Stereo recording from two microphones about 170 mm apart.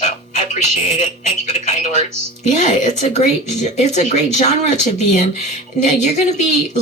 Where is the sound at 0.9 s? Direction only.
45° left (ahead or behind).